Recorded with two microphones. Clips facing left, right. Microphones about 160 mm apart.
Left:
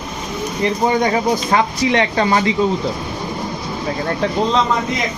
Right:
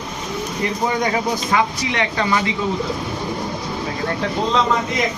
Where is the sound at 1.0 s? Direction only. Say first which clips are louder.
Left 4 dB; 35° left (ahead or behind).